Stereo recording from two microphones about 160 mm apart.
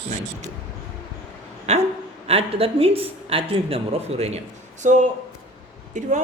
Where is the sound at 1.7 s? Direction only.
45° right (ahead or behind).